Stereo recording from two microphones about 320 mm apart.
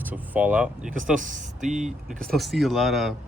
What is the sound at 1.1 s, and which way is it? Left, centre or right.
Speech, right.